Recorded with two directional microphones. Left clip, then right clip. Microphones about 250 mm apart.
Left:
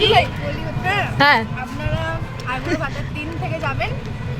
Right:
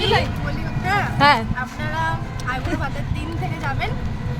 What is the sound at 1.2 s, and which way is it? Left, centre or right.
Speech, centre.